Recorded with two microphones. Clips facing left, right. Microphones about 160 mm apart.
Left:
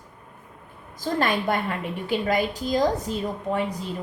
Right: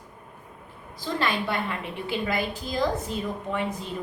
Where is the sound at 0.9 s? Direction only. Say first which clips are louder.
Left 3 dB; 45° left (ahead or behind).